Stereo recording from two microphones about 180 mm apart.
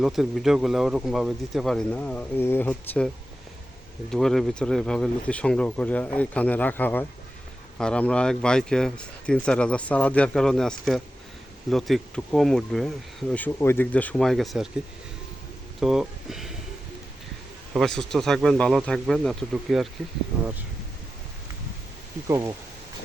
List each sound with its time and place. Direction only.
0.0 s speech: centre (ahead or behind)
4.1 s speech: centre (ahead or behind)
15.8 s speech: centre (ahead or behind)
17.7 s speech: 5° left (ahead or behind)
22.3 s speech: 15° right (ahead or behind)